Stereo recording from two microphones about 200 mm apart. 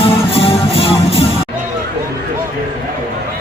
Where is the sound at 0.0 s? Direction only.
25° left (ahead or behind).